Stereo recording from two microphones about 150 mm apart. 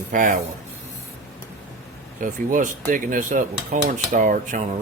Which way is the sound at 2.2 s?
60° right (ahead or behind).